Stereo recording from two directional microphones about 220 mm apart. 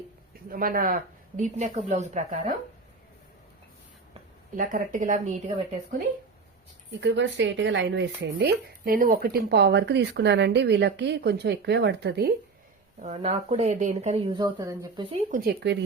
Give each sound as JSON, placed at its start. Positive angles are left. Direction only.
{"t": 0.5, "sound": "speech", "side_deg": -40}
{"t": 4.5, "sound": "speech", "side_deg": -35}
{"t": 7.0, "sound": "speech", "side_deg": -55}
{"t": 13.0, "sound": "speech", "side_deg": -30}
{"t": 14.3, "sound": "speech", "side_deg": -15}
{"t": 15.1, "sound": "speech", "side_deg": -40}